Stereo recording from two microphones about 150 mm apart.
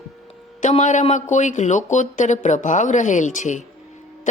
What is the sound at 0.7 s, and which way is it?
A woman's voice, 55° left (ahead or behind).